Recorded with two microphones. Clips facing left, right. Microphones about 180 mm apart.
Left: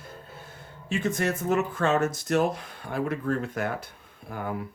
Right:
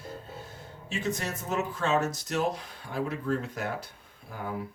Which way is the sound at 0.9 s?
55° left (ahead or behind).